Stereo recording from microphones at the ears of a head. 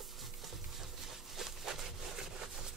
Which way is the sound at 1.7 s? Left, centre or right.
Right.